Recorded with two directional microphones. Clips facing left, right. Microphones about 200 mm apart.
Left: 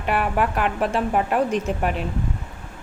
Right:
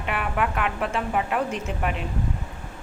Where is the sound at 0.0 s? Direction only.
40° left (ahead or behind).